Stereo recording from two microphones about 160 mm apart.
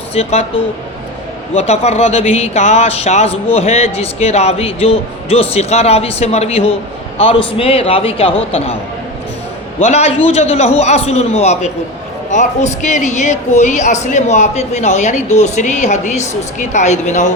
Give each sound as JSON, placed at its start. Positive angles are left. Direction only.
{"t": 0.1, "sound": "speech", "side_deg": 40}
{"t": 1.5, "sound": "speech", "side_deg": 40}
{"t": 9.8, "sound": "speech", "side_deg": 40}